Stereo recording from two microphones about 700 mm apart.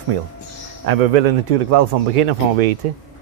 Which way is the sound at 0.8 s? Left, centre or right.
Right.